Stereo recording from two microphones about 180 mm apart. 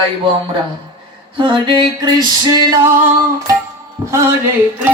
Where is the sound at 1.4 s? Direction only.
25° right (ahead or behind).